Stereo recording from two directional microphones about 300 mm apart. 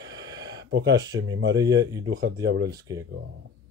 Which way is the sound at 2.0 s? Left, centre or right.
Right.